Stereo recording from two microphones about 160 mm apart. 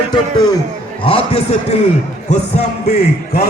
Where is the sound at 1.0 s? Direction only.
35° left (ahead or behind).